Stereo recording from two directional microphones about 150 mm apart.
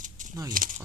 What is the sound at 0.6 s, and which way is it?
Speech, 65° right (ahead or behind).